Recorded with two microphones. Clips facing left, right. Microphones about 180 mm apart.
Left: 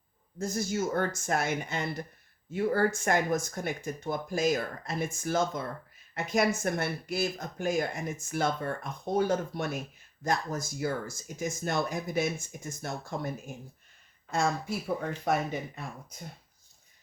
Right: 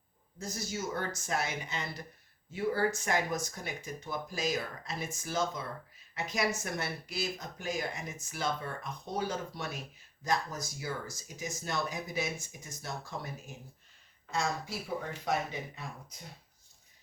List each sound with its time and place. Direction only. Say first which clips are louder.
0.3 s speech: left 8 dB; 50° left (ahead or behind)